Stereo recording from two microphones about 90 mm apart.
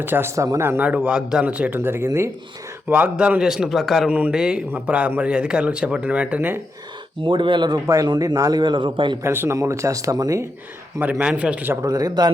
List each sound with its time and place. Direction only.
0.0 s speech: 25° right (ahead or behind)
0.9 s a man's voice: 15° right (ahead or behind); by 2.3 s 30° right (ahead or behind)
2.9 s a man's voice: 15° right (ahead or behind)
3.4 s a man's voice: 5° right (ahead or behind)
4.1 s a man's voice: 15° right (ahead or behind)
7.2 s a man's voice: 65° right (ahead or behind)
7.9 s a man's voice: 40° right (ahead or behind); by 9.1 s 60° right (ahead or behind)
9.2 s speech: 25° right (ahead or behind)
11.1 s a man's voice: 10° right (ahead or behind)
11.7 s speech: 40° right (ahead or behind)